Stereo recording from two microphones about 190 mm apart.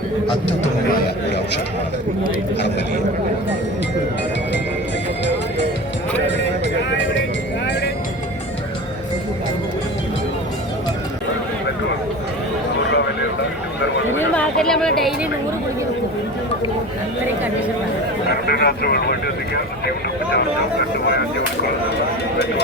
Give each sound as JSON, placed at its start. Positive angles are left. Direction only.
{"t": 0.9, "sound": "a sound", "side_deg": 55}
{"t": 6.2, "sound": "music", "side_deg": 65}
{"t": 6.9, "sound": "vehicle", "side_deg": 70}
{"t": 14.2, "sound": "chatter", "side_deg": 5}
{"t": 18.4, "sound": "speech", "side_deg": 55}
{"t": 20.3, "sound": "speech", "side_deg": 60}